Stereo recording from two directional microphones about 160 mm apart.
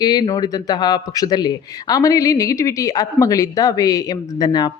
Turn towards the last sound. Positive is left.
turn(degrees=25)  # may be behind; listen again after turning